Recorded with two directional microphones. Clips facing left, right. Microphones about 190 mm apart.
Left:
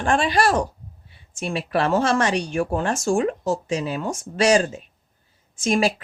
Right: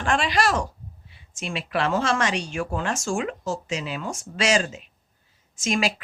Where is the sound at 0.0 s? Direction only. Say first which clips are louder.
Left 3 dB; 35° left (ahead or behind).